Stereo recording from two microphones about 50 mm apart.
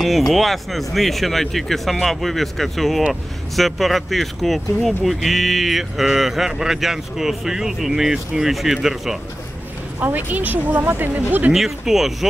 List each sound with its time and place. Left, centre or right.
0.0 s speech: centre
9.9 s speech: right
11.5 s speech: centre